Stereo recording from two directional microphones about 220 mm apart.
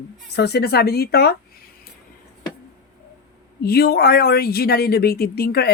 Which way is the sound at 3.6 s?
45° left (ahead or behind).